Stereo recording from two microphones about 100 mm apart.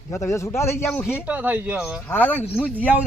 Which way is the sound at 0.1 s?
30° left (ahead or behind).